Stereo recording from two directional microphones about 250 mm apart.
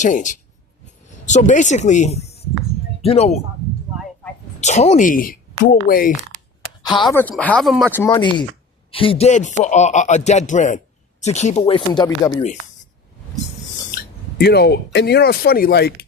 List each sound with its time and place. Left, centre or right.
0.0 s a man's voice: left
4.6 s speech: left
6.8 s speech: centre
7.2 s speech: centre
7.9 s a man's voice: centre
13.9 s a sound: left
14.9 s speech: left